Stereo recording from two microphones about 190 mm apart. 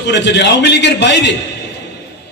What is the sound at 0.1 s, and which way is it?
A man's voice, 65° left (ahead or behind).